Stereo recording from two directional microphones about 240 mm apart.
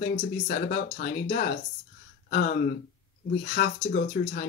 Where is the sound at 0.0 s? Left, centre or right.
Left.